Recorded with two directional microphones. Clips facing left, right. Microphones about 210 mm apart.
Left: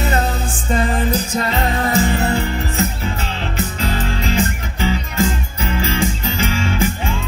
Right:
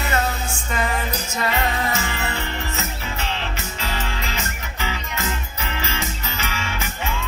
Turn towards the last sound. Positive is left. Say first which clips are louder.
# left 10 dB
turn(degrees=30)  # may be behind; listen again after turning